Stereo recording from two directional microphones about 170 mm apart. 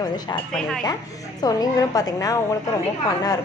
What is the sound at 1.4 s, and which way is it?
Speech, 20° left (ahead or behind).